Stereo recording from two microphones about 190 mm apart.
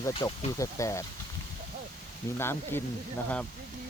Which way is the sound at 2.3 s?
10° left (ahead or behind).